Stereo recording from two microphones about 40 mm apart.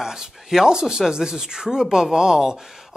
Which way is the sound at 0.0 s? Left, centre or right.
Centre.